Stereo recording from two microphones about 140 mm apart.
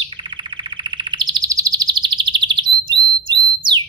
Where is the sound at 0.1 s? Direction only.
35° right (ahead or behind).